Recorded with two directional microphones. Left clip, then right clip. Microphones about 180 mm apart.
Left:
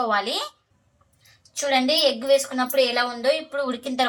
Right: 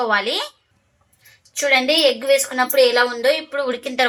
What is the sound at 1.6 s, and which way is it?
A woman's voice, 35° right (ahead or behind).